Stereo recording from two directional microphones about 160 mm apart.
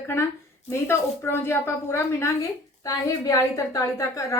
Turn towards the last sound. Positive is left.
turn(degrees=20)  # may be behind; listen again after turning